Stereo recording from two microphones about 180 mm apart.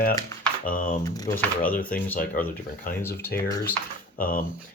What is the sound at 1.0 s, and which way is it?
Speech, 20° left (ahead or behind).